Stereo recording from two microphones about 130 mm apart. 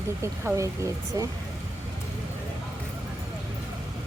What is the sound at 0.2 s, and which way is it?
Speech, 25° right (ahead or behind).